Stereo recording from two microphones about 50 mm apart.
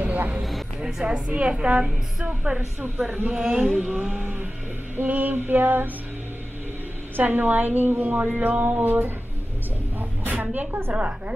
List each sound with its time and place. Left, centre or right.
0.0 s a sound: right
0.4 s a woman's voice: centre; by 3.4 s right
3.4 s a woman's voice: centre; by 5.9 s right
7.2 s a woman's voice: right
10.3 s a woman's voice: right